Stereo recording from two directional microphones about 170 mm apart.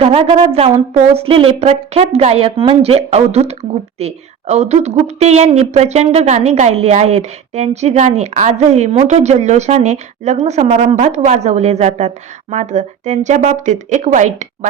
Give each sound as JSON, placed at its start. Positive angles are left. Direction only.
{"t": 0.0, "sound": "speech", "side_deg": -35}